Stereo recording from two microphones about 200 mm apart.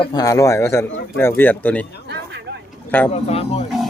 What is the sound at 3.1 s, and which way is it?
Speech, 30° left (ahead or behind).